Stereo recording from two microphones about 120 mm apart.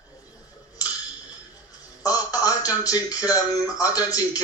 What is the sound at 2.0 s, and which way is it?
Speech, 30° left (ahead or behind).